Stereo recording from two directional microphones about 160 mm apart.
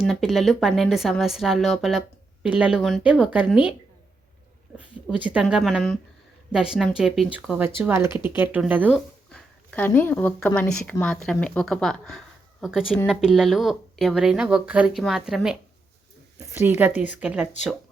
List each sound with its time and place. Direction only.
0.0 s a woman's voice: centre (ahead or behind)
4.8 s a woman's voice: 10° right (ahead or behind)
9.3 s a woman's voice: 10° left (ahead or behind)
16.6 s speech: 10° right (ahead or behind)